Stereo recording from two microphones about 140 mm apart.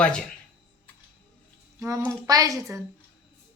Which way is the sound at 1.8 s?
25° right (ahead or behind).